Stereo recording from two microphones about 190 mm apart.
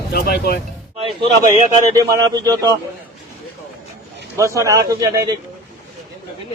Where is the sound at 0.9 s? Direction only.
30° right (ahead or behind).